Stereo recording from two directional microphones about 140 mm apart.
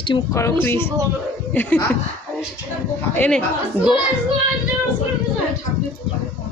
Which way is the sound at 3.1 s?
5° left (ahead or behind).